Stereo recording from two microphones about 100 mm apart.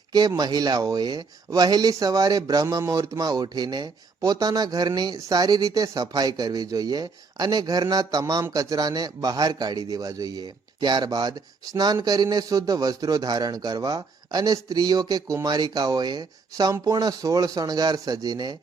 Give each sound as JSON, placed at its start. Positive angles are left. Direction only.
{"t": 0.1, "sound": "speech", "side_deg": -40}